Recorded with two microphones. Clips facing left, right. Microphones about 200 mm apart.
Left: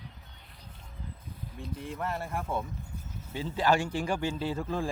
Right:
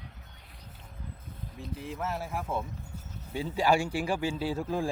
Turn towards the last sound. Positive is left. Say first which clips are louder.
# right 1 dB
turn(degrees=-10)  # may be behind; listen again after turning